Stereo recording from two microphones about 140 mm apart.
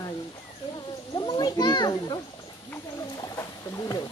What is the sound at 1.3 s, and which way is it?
Children playing, 30° left (ahead or behind).